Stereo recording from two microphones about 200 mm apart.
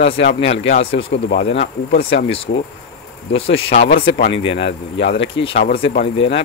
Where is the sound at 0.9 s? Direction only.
65° left (ahead or behind).